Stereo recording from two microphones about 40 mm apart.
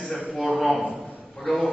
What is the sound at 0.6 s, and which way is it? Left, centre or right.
Speech, centre.